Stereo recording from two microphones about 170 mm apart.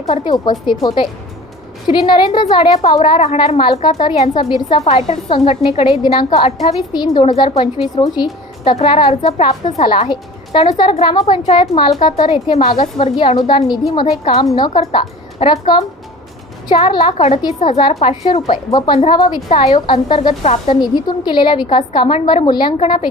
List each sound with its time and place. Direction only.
0.1 s a woman's voice: 30° left (ahead or behind)
4.9 s a woman's voice: 35° left (ahead or behind)
6.3 s a woman's voice: 40° left (ahead or behind)
6.9 s a woman's voice: 25° left (ahead or behind); by 13.1 s 40° left (ahead or behind)
13.1 s a woman's voice: 30° left (ahead or behind)
18.5 s a woman's voice: 25° left (ahead or behind)
20.8 s a woman's voice: 25° left (ahead or behind)